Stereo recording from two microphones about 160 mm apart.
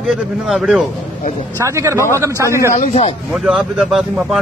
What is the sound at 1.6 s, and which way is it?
Speech, 20° right (ahead or behind).